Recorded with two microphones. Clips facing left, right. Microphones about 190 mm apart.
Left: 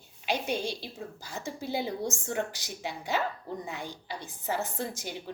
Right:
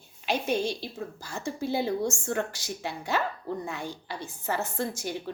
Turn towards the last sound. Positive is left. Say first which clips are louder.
# right 4 dB
turn(degrees=15)  # may be behind; listen again after turning